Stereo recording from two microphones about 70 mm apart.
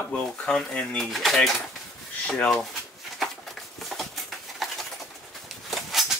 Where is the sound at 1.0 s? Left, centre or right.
Centre.